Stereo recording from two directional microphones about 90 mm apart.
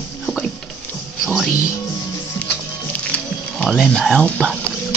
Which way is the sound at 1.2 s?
Centre (ahead or behind).